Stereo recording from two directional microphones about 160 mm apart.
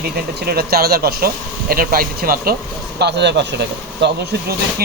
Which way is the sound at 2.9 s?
90° right.